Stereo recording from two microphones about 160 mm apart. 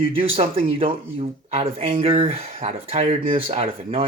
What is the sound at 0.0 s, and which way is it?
Speech, 35° right (ahead or behind).